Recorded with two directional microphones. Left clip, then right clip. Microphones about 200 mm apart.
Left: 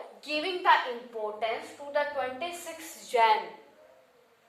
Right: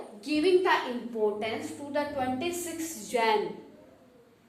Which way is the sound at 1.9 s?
Centre (ahead or behind).